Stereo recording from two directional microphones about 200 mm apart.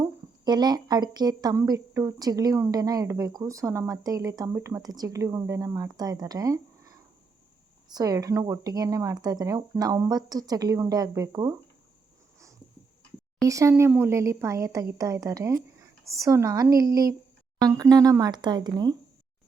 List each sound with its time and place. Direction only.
0.0 s a woman's voice: 20° right (ahead or behind)
13.5 s a woman's voice: 15° right (ahead or behind)